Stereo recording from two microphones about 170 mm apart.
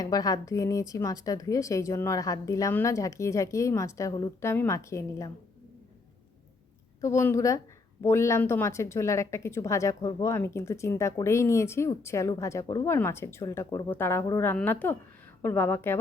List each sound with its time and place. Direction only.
0.0 s a woman's voice: 20° left (ahead or behind)
7.0 s a woman's voice: 15° left (ahead or behind)